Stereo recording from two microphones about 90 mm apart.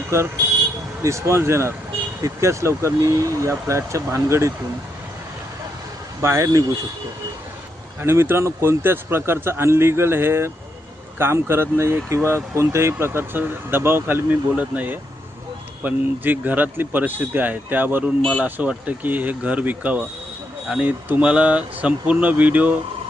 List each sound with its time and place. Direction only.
1.0 s speech: 35° right (ahead or behind)
6.2 s speech: 30° right (ahead or behind)
8.0 s speech: 25° right (ahead or behind)